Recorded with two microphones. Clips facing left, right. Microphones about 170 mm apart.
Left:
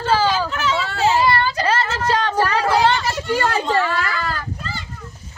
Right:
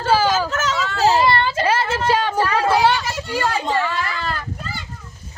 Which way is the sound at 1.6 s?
10° right (ahead or behind).